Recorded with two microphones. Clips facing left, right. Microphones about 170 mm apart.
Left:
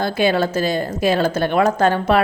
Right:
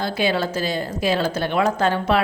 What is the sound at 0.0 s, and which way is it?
A woman's voice, 50° left (ahead or behind).